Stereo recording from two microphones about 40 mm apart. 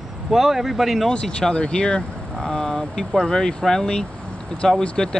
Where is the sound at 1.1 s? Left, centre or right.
Left.